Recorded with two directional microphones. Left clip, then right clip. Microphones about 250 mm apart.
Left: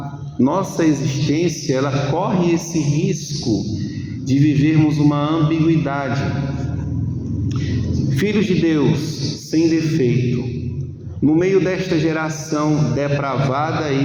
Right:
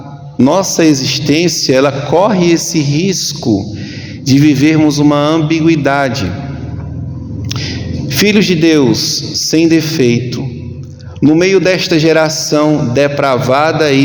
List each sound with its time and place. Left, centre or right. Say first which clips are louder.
0.4 s a man's voice: right 8 dB; right
4.3 s a man's voice: right 8 dB; right
8.1 s a man's voice: right 9 dB; right
11.2 s a man's voice: right 7 dB; right